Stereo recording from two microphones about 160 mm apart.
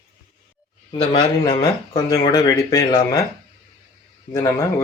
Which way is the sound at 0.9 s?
30° left (ahead or behind).